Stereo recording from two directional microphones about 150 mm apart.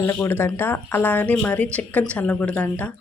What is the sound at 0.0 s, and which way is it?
Speech, 15° left (ahead or behind).